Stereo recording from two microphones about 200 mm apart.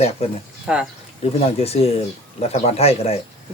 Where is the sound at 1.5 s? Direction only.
30° left (ahead or behind).